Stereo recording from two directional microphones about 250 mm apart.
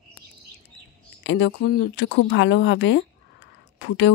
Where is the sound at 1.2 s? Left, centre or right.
Left.